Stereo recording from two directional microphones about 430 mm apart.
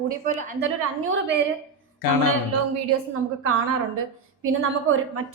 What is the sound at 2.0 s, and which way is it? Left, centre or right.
Speech, left.